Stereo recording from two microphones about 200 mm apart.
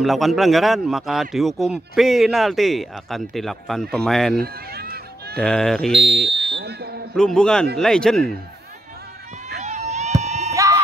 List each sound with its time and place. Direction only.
0.0 s a man's voice: centre (ahead or behind)
4.4 s run: 50° right (ahead or behind)
5.4 s a man's voice: 5° left (ahead or behind)
6.5 s fire alarm: 55° right (ahead or behind)
7.2 s a man's voice: 5° left (ahead or behind)
9.6 s run: 35° right (ahead or behind)
10.2 s a sound: 35° right (ahead or behind)
10.5 s a sound: 15° right (ahead or behind)